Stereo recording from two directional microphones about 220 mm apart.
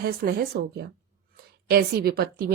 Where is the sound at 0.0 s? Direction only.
45° right (ahead or behind).